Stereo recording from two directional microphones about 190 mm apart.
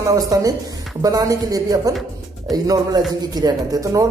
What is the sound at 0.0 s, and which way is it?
A man's voice, 20° right (ahead or behind).